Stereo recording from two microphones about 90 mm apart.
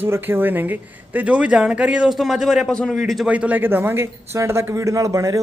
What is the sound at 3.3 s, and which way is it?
A man's voice, 15° right (ahead or behind).